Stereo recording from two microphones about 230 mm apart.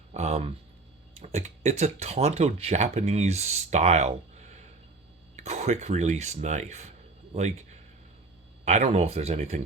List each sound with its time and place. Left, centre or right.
0.1 s speech: right
8.6 s speech: right